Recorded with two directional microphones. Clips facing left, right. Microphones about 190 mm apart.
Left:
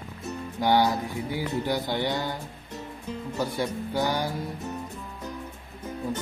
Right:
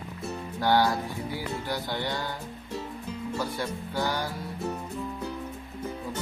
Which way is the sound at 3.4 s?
15° left (ahead or behind).